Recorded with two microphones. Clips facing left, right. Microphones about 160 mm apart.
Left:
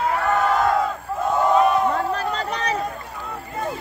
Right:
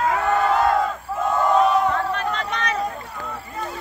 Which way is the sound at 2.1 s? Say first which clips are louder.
Even; 35° left (ahead or behind).